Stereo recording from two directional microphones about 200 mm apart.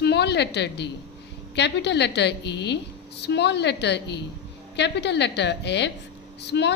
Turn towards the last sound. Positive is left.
turn(degrees=60)  # may be behind; listen again after turning